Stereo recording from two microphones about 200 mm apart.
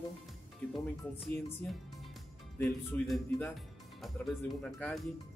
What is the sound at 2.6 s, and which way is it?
Speech, 5° left (ahead or behind).